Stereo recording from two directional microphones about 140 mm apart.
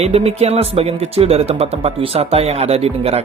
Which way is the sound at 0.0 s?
50° right (ahead or behind).